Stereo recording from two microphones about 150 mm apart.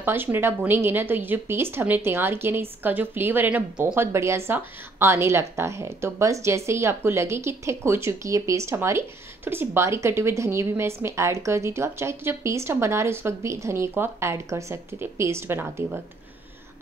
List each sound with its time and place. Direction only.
0.0 s a woman's voice: 15° right (ahead or behind)